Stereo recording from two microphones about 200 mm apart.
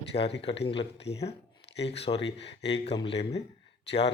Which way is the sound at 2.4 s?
60° left (ahead or behind).